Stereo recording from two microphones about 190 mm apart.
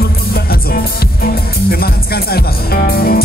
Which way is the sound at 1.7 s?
55° left (ahead or behind).